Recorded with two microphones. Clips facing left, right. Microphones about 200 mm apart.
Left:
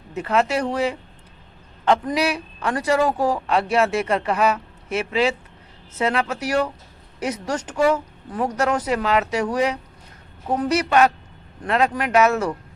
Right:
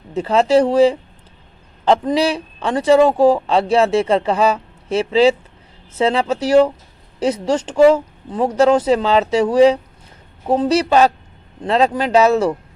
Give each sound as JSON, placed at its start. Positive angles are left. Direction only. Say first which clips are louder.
{"t": 0.1, "sound": "speech", "louder": "right 7 dB", "side_deg": -30}